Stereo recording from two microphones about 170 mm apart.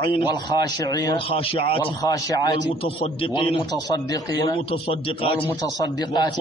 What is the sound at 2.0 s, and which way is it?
Speech, 20° left (ahead or behind).